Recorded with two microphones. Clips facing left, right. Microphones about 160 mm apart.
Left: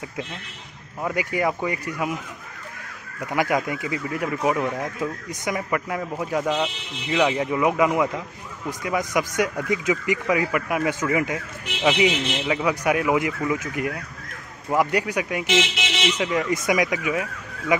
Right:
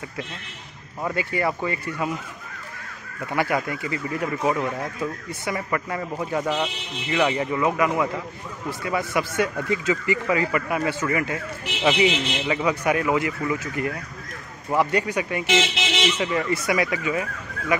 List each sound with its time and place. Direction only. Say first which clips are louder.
1.0 s speech: left 1 dB; 15° left (ahead or behind)
3.3 s speech: left 1 dB; 15° left (ahead or behind)
7.6 s speech: left 2 dB; 20° left (ahead or behind)
11.8 s speech: even; 5° left (ahead or behind)